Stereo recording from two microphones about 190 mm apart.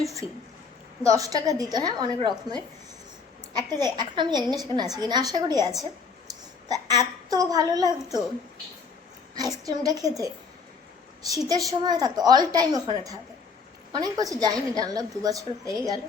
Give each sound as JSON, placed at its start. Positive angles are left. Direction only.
{"t": 1.0, "sound": "a woman's voice", "side_deg": -15}
{"t": 6.7, "sound": "a woman's voice", "side_deg": -20}
{"t": 9.6, "sound": "a woman's voice", "side_deg": -20}